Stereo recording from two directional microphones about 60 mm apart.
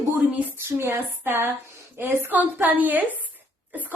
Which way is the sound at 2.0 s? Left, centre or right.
Right.